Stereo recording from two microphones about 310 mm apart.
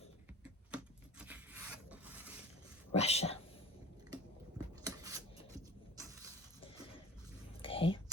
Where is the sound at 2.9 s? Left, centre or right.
Centre.